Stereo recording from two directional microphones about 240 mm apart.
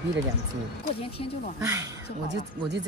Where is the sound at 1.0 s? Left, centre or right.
Left.